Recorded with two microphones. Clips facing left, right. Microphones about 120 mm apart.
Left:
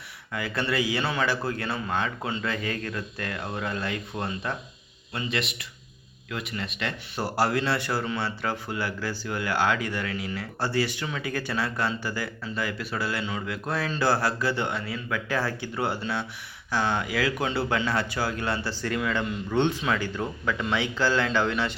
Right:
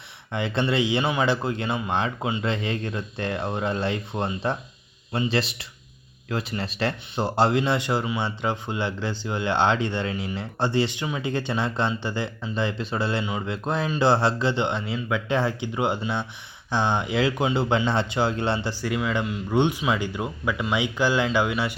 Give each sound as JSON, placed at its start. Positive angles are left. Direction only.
{"t": 0.3, "sound": "speech", "side_deg": -25}
{"t": 7.2, "sound": "speech", "side_deg": -25}
{"t": 18.7, "sound": "speech", "side_deg": -10}